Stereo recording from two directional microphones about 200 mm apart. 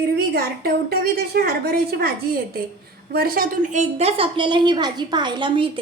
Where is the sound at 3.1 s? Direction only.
50° right (ahead or behind).